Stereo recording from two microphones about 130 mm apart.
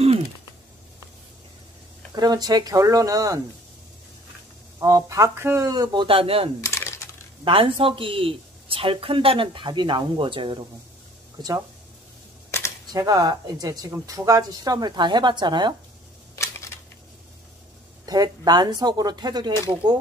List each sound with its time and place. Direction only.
2.1 s speech: 30° right (ahead or behind)
4.7 s speech: 25° right (ahead or behind)
6.0 s speech: 45° right (ahead or behind)
6.6 s a sound: 20° left (ahead or behind)
7.4 s speech: 45° right (ahead or behind)
11.3 s speech: 30° right (ahead or behind)
12.4 s camera: 20° left (ahead or behind)
12.9 s speech: 30° right (ahead or behind)
18.0 s speech: 30° right (ahead or behind)